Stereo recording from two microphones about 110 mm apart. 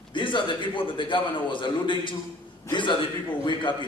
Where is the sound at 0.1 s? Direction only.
45° left (ahead or behind).